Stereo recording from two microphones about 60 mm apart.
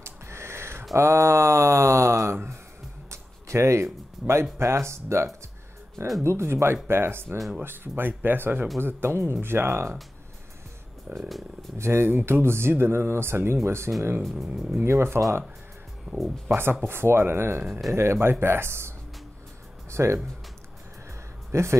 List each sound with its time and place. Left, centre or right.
0.0 s a sound: right
3.1 s speech: right
11.1 s speech: right
11.8 s speech: right
14.4 s speech: centre
14.9 s speech: right
16.1 s speech: centre
16.4 s speech: right
21.5 s speech: right